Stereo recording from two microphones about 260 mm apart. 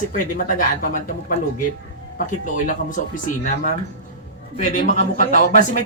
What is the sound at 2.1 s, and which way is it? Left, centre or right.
Speech, left.